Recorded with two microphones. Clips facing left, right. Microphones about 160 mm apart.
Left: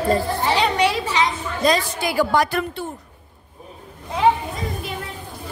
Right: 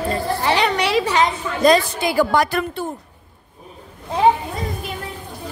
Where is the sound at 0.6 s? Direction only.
70° right (ahead or behind).